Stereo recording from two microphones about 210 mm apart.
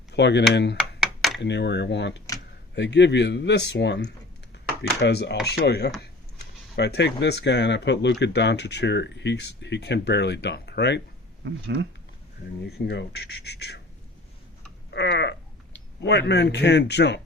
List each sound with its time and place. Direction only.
0.1 s speech: 55° left (ahead or behind)
0.9 s a sound: centre (ahead or behind)
1.4 s a man's voice: 55° left (ahead or behind)
12.6 s a man's voice: 55° left (ahead or behind)
14.8 s a sound: 55° left (ahead or behind)
16.0 s a man's voice: 55° left (ahead or behind)